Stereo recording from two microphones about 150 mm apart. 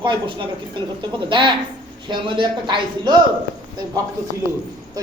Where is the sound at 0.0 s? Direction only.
30° right (ahead or behind).